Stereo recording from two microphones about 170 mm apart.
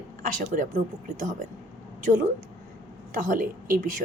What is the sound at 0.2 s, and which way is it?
A woman's voice, 50° right (ahead or behind).